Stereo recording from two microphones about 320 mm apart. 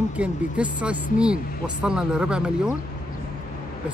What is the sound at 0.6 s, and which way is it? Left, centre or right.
Speech, centre.